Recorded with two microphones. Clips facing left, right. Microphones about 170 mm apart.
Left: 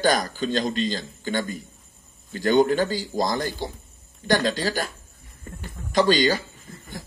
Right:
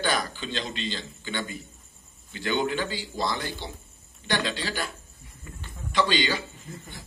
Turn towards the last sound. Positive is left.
turn(degrees=40)  # may be behind; listen again after turning